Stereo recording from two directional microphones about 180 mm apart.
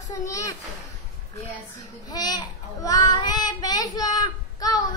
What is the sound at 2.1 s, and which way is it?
A child's voice, 20° left (ahead or behind).